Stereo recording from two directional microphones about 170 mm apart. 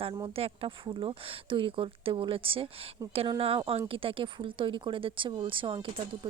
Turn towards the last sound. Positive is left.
turn(degrees=-30)  # may be behind; listen again after turning